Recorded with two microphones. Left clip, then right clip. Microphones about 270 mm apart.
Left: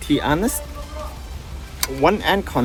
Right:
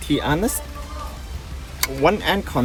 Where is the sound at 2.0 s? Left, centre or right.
Left.